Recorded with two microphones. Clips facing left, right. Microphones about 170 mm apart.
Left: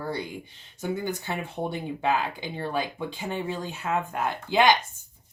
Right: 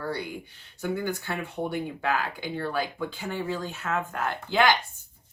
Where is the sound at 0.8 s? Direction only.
15° left (ahead or behind).